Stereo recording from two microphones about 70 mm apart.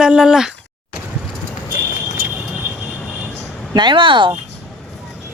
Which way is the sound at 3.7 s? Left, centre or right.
Right.